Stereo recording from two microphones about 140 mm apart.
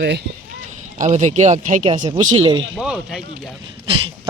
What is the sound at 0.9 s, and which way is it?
Speech, 60° right (ahead or behind).